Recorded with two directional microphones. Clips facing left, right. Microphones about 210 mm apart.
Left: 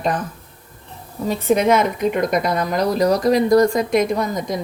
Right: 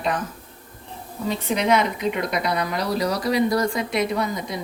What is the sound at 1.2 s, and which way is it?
A woman's voice, 50° left (ahead or behind).